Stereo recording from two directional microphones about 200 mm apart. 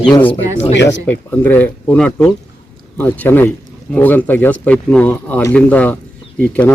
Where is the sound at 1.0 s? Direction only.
10° left (ahead or behind).